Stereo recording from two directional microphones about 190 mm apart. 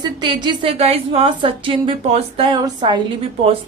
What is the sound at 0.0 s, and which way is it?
A woman's voice, 25° right (ahead or behind).